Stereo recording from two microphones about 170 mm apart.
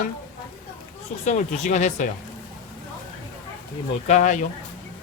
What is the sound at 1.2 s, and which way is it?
Speech, 45° left (ahead or behind).